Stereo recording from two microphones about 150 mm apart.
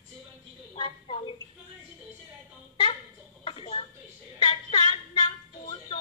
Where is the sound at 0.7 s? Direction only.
35° left (ahead or behind).